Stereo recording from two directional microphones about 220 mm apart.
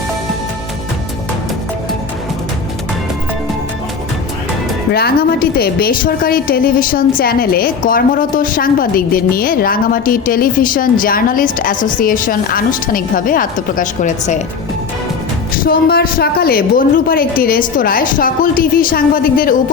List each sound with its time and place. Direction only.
4.9 s a woman's voice: 45° left (ahead or behind)
15.5 s a woman's voice: 40° left (ahead or behind)